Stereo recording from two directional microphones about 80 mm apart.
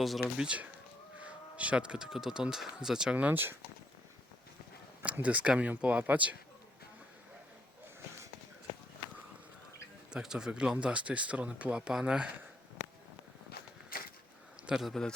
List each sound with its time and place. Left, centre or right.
0.0 s speech: centre
0.4 s speech: centre
5.0 s speech: centre
10.1 s speech: centre
14.7 s speech: centre